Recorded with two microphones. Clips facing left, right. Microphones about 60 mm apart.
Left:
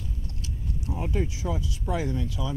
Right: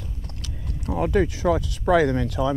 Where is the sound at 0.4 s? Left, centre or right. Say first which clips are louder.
Even; right.